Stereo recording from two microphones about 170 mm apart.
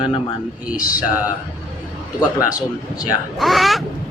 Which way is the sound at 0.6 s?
10° right (ahead or behind).